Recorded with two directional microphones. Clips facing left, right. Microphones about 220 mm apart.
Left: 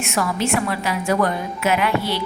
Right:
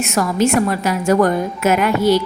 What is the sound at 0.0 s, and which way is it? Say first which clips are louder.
A woman's voice: right 6 dB; 40° right (ahead or behind).